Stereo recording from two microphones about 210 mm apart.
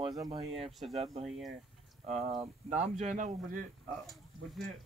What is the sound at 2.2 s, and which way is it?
A man's voice, 30° right (ahead or behind).